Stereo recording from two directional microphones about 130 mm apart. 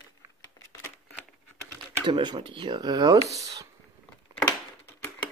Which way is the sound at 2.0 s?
35° right (ahead or behind).